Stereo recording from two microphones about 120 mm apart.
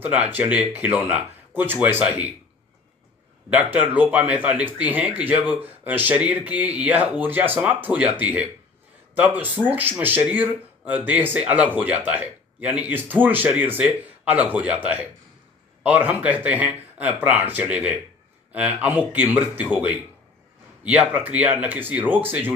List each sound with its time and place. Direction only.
0.0 s speech: 15° right (ahead or behind)
3.5 s speech: 10° right (ahead or behind)
20.8 s speech: 10° right (ahead or behind)